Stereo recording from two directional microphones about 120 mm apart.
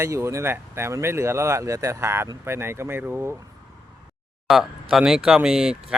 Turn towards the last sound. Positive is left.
turn(degrees=-5)  # may be behind; listen again after turning